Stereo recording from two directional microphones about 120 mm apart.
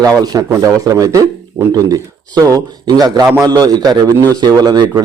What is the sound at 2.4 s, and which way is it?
A man's voice, 30° right (ahead or behind).